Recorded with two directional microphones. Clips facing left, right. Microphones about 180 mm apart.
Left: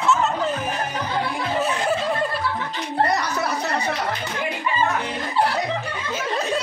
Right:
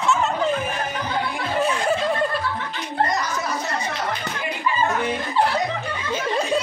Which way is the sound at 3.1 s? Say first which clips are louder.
Left 2 dB; 65° left (ahead or behind).